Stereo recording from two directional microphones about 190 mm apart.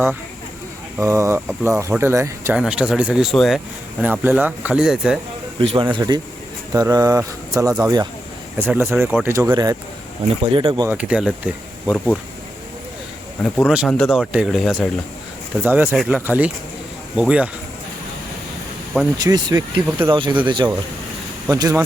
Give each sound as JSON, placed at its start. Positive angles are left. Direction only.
{"t": 0.9, "sound": "speech", "side_deg": -15}
{"t": 2.6, "sound": "speech", "side_deg": -5}
{"t": 5.5, "sound": "speech", "side_deg": -25}
{"t": 10.8, "sound": "speech", "side_deg": -5}
{"t": 11.9, "sound": "speech", "side_deg": 5}
{"t": 13.4, "sound": "speech", "side_deg": 0}
{"t": 15.6, "sound": "speech", "side_deg": -10}
{"t": 19.2, "sound": "speech", "side_deg": -20}